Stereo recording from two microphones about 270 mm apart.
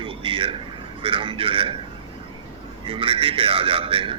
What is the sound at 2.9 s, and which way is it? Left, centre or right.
A man's voice, centre.